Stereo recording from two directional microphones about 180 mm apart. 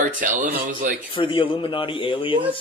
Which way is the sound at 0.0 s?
45° right (ahead or behind).